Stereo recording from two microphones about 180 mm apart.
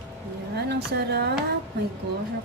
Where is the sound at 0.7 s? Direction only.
70° right (ahead or behind).